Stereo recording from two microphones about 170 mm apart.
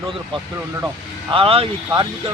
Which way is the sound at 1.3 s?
35° right (ahead or behind).